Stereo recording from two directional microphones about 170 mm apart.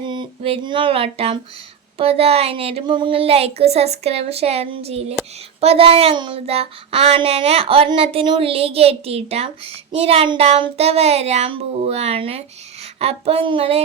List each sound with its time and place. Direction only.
0.0 s child singing: 25° right (ahead or behind)